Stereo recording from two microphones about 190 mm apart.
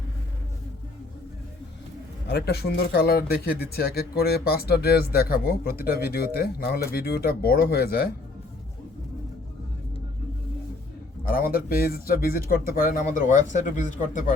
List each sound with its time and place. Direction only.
2.2 s speech: 60° left (ahead or behind)
11.3 s speech: 50° left (ahead or behind)